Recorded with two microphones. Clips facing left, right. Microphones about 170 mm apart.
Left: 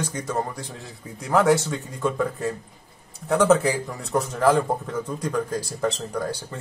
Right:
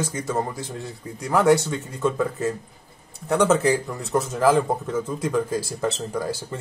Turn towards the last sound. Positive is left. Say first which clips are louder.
# even
turn(degrees=-5)  # may be behind; listen again after turning